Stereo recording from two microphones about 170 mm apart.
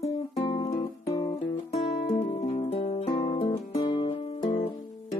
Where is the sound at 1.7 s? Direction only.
40° left (ahead or behind).